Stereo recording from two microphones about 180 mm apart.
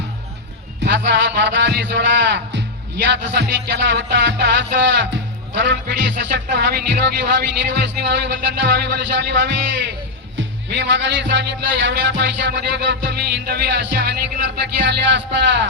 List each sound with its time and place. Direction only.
0.9 s speech: 90° right